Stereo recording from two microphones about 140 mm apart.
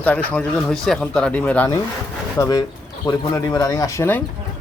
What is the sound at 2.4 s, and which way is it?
Speech, 25° left (ahead or behind).